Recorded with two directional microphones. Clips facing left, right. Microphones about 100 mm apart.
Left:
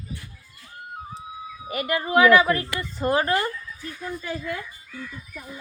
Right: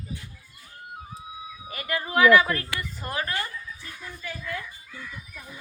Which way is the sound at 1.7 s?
20° left (ahead or behind).